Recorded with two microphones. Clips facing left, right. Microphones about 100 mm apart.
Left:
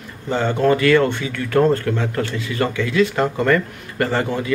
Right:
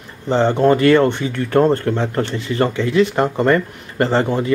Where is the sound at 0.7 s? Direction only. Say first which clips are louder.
Right 2 dB; 35° right (ahead or behind).